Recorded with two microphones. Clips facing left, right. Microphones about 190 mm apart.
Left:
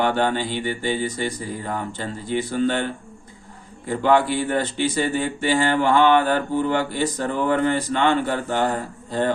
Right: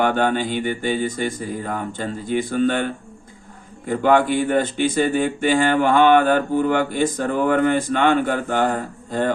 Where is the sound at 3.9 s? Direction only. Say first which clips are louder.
Right 2 dB; 50° right (ahead or behind).